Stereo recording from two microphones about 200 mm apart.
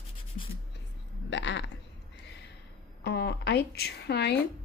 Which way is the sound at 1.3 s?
65° left (ahead or behind).